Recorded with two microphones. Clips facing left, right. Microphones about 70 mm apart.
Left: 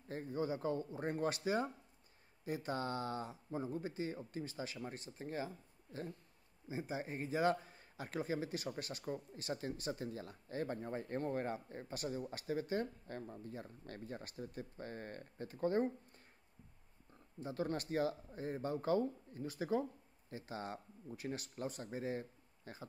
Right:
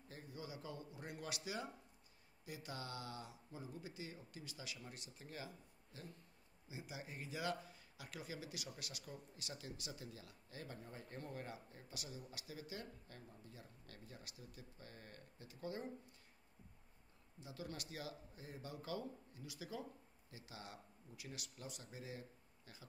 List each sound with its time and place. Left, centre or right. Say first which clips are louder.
0.1 s a man's voice: left 13 dB; left
17.4 s a man's voice: left 11 dB; left